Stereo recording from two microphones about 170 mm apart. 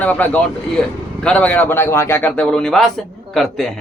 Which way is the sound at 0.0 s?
10° left (ahead or behind).